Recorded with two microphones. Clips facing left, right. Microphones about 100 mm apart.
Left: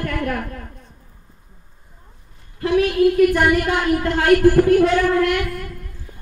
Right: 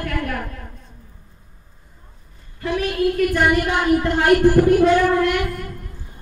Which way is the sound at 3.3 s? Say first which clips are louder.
Left 1 dB; centre (ahead or behind).